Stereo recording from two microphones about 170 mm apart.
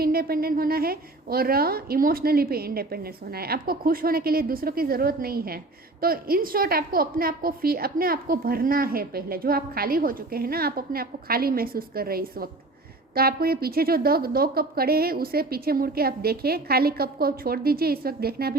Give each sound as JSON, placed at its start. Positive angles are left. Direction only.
{"t": 0.0, "sound": "a woman's voice", "side_deg": -65}